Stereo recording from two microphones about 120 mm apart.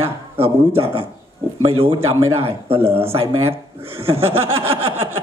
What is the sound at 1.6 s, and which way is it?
Speech, 45° right (ahead or behind).